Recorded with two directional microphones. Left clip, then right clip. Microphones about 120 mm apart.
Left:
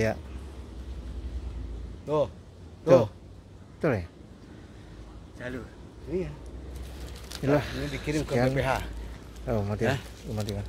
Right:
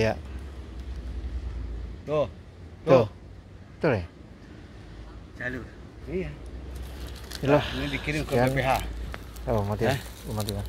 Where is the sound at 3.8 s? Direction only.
10° left (ahead or behind).